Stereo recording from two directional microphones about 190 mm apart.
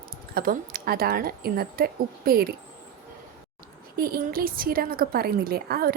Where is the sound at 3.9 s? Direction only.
50° right (ahead or behind).